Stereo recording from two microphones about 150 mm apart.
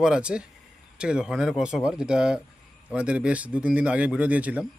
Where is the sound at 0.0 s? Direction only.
5° right (ahead or behind).